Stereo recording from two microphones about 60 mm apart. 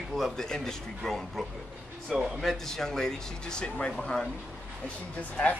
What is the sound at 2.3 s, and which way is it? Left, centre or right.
Speech, centre.